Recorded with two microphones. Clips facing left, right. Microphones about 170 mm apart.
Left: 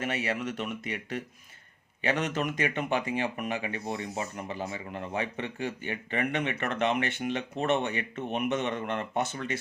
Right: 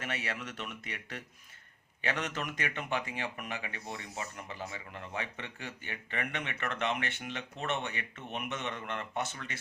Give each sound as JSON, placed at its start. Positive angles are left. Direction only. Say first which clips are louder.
{"t": 0.0, "sound": "speech", "louder": "left 7 dB", "side_deg": 15}
{"t": 5.1, "sound": "speech", "louder": "left 7 dB", "side_deg": 20}